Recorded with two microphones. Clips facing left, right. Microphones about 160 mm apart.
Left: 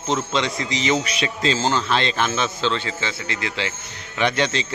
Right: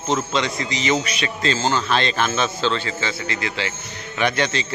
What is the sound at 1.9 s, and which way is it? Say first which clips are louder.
A man's voice: right 1 dB; 20° left (ahead or behind).